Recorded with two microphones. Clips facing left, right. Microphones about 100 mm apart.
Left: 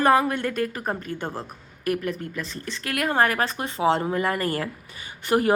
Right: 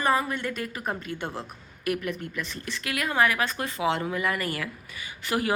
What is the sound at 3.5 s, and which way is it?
A woman's voice, 30° left (ahead or behind).